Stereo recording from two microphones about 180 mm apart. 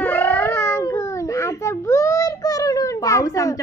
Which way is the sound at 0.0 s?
10° left (ahead or behind).